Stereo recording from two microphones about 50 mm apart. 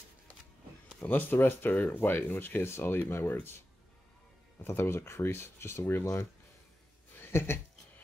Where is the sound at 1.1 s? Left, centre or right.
Left.